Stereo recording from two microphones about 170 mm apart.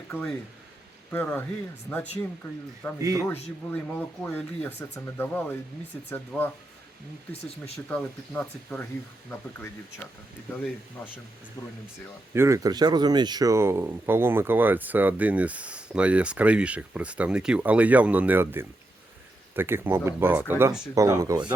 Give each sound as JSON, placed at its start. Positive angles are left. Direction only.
{"t": 0.1, "sound": "speech", "side_deg": 10}
{"t": 3.0, "sound": "speech", "side_deg": -20}
{"t": 3.2, "sound": "speech", "side_deg": 10}
{"t": 7.6, "sound": "speech", "side_deg": 10}
{"t": 10.5, "sound": "speech", "side_deg": 10}
{"t": 12.3, "sound": "speech", "side_deg": -15}